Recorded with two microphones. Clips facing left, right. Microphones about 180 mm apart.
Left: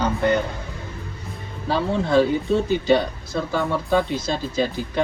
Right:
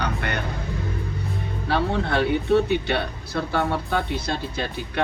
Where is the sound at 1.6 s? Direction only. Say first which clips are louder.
Left 2 dB; 65° right (ahead or behind).